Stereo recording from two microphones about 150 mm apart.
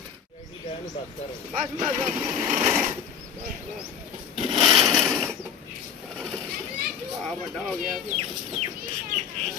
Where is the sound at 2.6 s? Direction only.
10° right (ahead or behind).